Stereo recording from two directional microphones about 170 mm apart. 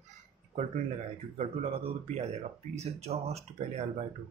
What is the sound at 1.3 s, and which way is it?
Speech, 40° right (ahead or behind).